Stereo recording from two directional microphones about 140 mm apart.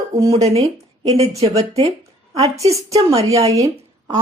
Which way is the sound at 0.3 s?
50° right (ahead or behind).